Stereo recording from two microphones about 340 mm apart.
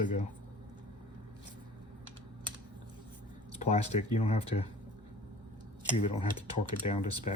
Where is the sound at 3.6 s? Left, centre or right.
Centre.